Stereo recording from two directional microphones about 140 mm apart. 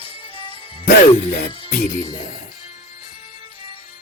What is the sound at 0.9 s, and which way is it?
Speech, 90° left.